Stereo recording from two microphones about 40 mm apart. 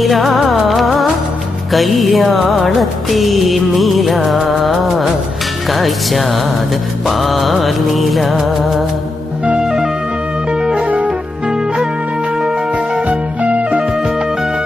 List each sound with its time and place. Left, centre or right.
0.0 s music: centre
9.6 s music: centre
10.5 s music: right
13.1 s music: right